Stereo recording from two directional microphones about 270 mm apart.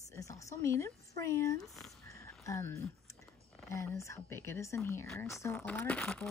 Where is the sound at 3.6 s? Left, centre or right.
Centre.